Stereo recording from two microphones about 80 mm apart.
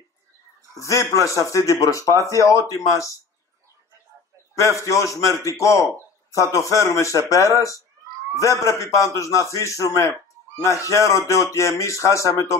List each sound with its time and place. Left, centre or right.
0.7 s speech: left
4.6 s speech: left